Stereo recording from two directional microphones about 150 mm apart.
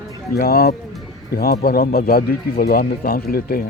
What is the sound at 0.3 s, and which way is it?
Speech, 85° left.